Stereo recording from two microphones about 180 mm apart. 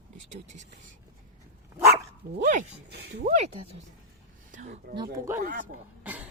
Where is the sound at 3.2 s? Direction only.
40° right (ahead or behind).